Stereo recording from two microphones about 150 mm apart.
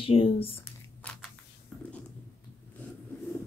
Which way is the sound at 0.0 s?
40° left (ahead or behind).